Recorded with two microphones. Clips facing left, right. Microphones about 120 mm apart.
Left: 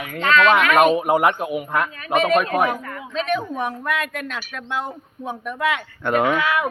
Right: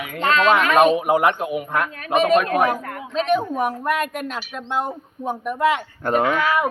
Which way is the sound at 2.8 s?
40° right (ahead or behind).